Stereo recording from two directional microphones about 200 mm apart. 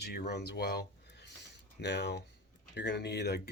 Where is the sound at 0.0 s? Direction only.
55° left (ahead or behind).